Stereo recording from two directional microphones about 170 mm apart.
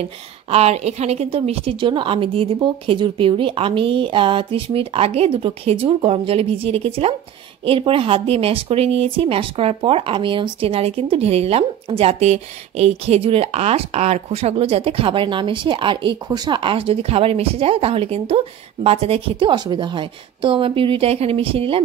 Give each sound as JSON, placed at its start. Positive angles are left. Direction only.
{"t": 0.0, "sound": "speech", "side_deg": -35}